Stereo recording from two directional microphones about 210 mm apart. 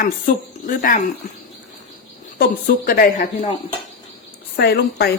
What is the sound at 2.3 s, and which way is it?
A woman's voice, 45° left (ahead or behind).